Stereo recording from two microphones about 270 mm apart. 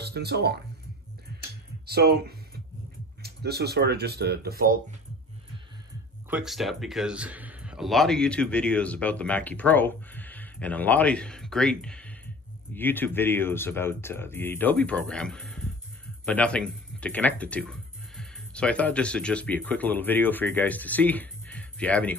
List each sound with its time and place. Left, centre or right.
0.0 s speech: right
1.9 s speech: right
6.3 s speech: centre